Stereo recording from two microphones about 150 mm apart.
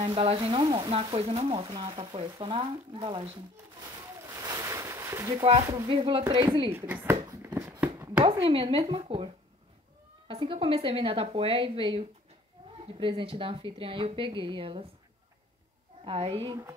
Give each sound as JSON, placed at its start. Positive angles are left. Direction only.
{"t": 0.0, "sound": "speech", "side_deg": -40}
{"t": 3.9, "sound": "a sound", "side_deg": -20}
{"t": 5.4, "sound": "speech", "side_deg": -35}
{"t": 6.7, "sound": "speech", "side_deg": -15}
{"t": 7.2, "sound": "a sound", "side_deg": -20}
{"t": 8.2, "sound": "speech", "side_deg": -35}
{"t": 16.0, "sound": "speech", "side_deg": -40}